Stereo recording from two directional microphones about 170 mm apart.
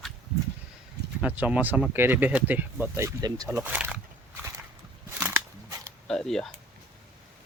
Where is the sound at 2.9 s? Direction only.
20° right (ahead or behind).